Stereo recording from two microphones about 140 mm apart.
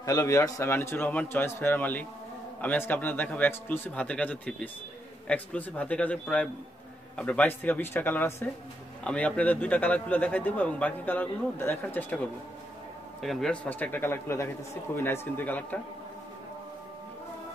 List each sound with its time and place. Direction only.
0.0 s speech: 25° left (ahead or behind)
13.2 s speech: centre (ahead or behind)